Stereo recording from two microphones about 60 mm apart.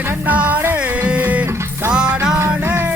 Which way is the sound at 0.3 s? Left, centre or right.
Right.